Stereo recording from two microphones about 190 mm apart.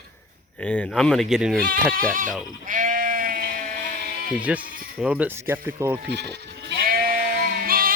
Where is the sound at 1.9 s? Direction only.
45° right (ahead or behind).